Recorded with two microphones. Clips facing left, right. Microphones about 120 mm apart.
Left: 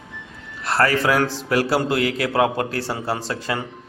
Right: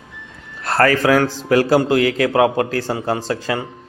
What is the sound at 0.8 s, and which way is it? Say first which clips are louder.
Speech: right 4 dB; 50° right (ahead or behind).